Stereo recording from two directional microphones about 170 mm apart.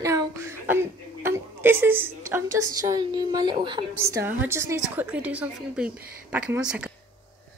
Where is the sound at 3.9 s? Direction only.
15° right (ahead or behind).